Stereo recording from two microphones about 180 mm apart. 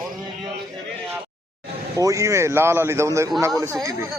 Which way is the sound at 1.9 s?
15° right (ahead or behind).